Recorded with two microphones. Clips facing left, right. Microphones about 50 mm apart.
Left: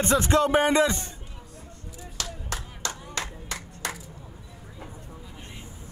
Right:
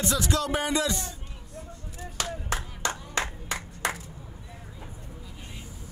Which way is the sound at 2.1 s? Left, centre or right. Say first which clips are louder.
Right 4 dB; right.